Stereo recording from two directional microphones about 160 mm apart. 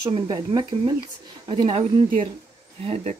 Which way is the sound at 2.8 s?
40° right (ahead or behind).